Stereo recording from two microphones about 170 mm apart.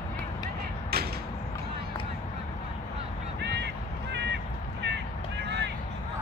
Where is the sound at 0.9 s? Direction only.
65° right (ahead or behind).